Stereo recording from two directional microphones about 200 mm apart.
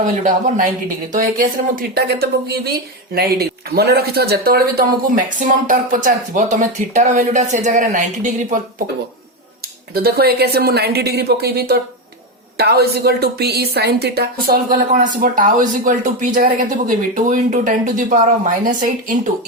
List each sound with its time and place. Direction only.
0.0 s speech: 40° right (ahead or behind)
1.7 s a woman's voice: 50° right (ahead or behind)
9.9 s a woman's voice: 50° right (ahead or behind)